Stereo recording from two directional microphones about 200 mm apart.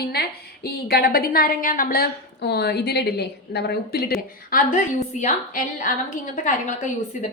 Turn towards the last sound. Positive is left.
turn(degrees=40)  # may be behind; listen again after turning